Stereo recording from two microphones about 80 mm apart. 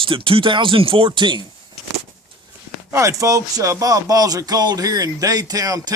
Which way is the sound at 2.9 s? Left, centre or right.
Right.